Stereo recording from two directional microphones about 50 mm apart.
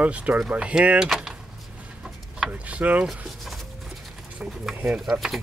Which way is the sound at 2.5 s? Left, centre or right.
Right.